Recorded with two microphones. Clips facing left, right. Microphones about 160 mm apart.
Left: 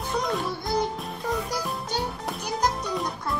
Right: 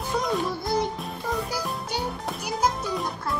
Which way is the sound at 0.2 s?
Centre (ahead or behind).